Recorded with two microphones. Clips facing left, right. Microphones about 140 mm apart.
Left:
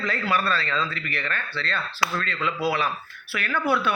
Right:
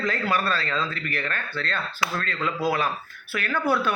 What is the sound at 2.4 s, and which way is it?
Speech, 5° left (ahead or behind).